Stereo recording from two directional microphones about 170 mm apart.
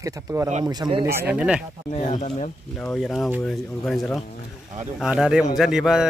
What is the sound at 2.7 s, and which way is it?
A man's voice, 5° left (ahead or behind).